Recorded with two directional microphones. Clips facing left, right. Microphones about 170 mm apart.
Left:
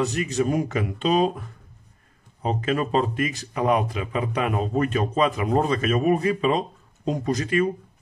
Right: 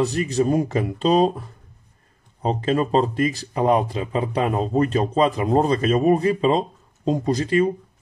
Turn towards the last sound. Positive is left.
turn(degrees=-30)  # may be behind; listen again after turning